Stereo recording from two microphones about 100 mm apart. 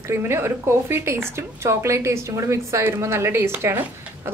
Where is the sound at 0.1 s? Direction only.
25° right (ahead or behind).